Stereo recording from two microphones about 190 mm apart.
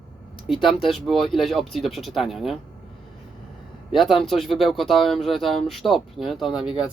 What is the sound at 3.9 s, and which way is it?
Speech, centre (ahead or behind).